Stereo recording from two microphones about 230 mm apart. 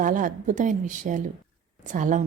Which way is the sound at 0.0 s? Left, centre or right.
Right.